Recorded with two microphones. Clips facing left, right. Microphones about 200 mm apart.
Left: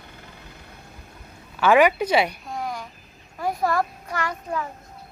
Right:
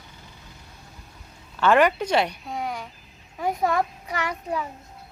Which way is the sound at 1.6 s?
10° left (ahead or behind).